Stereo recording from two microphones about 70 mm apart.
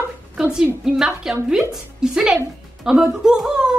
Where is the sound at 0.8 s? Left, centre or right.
Centre.